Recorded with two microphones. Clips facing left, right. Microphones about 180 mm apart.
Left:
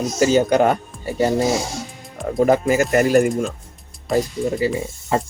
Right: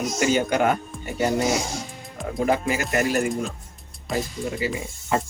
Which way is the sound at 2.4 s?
40° left (ahead or behind).